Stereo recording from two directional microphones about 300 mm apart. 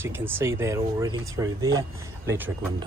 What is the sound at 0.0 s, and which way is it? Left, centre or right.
Speech, centre.